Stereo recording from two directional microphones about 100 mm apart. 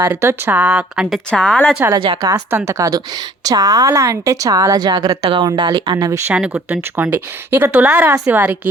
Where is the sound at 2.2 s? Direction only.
35° right (ahead or behind).